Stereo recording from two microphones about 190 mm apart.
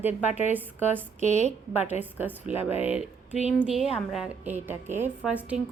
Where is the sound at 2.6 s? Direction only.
30° left (ahead or behind).